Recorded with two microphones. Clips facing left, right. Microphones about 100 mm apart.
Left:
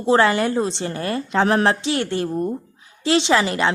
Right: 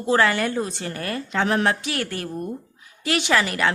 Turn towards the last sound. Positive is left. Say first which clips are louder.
# left 3 dB
turn(degrees=25)  # may be behind; listen again after turning